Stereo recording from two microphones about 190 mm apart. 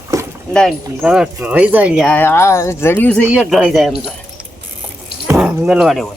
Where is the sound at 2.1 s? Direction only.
10° left (ahead or behind).